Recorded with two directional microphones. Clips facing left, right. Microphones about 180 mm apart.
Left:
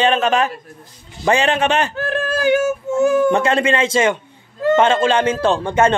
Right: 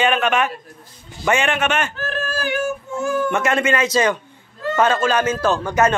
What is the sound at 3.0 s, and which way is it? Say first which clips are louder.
Speech: left 7 dB; 20° left (ahead or behind).